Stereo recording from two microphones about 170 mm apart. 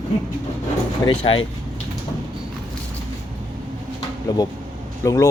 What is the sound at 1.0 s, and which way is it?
Speech, 30° left (ahead or behind).